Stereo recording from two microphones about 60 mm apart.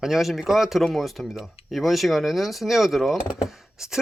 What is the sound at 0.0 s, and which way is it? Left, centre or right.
Speech, centre.